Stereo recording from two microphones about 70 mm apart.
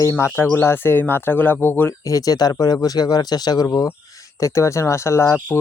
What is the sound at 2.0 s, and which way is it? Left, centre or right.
Speech, left.